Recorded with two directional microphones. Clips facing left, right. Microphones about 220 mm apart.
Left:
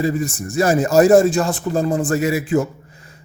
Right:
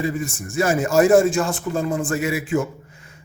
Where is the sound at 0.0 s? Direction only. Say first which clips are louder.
Left 4 dB; 40° left (ahead or behind).